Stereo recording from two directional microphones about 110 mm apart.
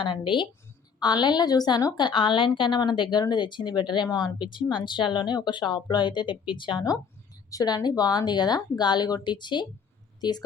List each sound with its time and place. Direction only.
0.0 s a woman's voice: 50° left (ahead or behind)
7.5 s a woman's voice: 35° left (ahead or behind)